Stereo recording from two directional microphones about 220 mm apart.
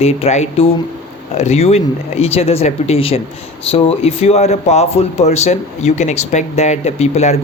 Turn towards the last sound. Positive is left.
turn(degrees=30)  # may be behind; listen again after turning